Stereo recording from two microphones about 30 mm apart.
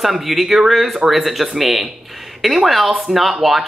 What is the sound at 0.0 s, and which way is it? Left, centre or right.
Speech, centre.